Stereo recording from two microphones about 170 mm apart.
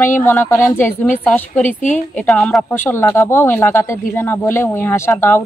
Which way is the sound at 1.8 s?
45° left (ahead or behind).